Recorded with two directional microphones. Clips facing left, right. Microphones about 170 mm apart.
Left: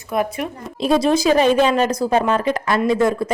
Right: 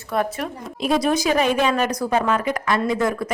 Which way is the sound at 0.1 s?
10° left (ahead or behind).